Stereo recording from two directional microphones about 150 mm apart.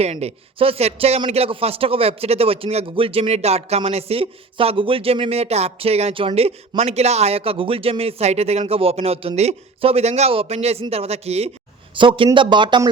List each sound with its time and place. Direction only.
0.0 s a man's voice: 45° right (ahead or behind)